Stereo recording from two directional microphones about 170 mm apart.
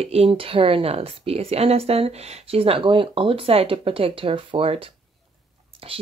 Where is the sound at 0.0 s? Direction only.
35° right (ahead or behind).